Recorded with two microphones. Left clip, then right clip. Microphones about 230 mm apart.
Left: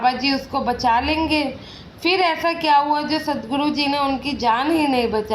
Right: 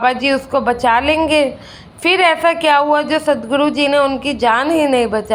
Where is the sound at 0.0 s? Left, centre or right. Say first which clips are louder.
Right 5 dB; right.